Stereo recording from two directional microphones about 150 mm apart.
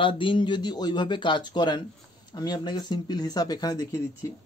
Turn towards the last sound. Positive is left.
turn(degrees=25)  # may be behind; listen again after turning